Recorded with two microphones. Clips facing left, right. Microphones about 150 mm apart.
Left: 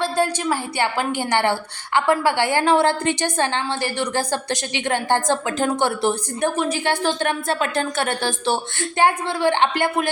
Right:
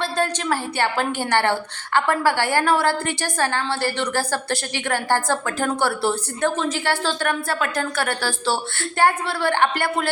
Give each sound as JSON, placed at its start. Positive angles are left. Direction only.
{"t": 0.0, "sound": "a woman's voice", "side_deg": 15}